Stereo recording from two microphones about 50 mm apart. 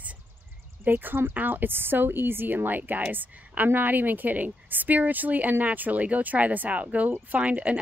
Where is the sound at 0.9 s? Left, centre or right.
Right.